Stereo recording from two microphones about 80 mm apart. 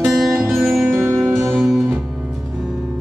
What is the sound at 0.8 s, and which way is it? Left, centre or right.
Music, right.